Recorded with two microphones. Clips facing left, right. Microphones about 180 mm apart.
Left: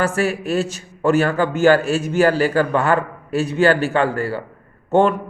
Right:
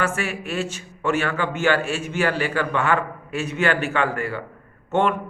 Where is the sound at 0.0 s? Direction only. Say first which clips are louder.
Left 6 dB; 35° left (ahead or behind).